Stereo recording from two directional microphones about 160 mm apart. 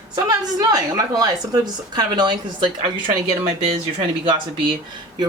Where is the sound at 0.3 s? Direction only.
25° right (ahead or behind).